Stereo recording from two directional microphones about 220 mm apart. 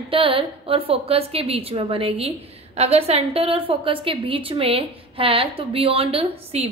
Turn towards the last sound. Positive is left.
turn(degrees=-25)  # may be behind; listen again after turning